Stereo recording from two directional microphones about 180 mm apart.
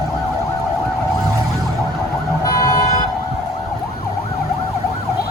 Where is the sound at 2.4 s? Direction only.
15° left (ahead or behind).